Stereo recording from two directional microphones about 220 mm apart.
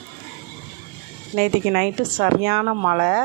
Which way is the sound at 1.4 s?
45° right (ahead or behind).